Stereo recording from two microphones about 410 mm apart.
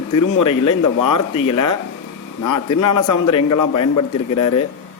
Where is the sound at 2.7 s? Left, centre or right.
Left.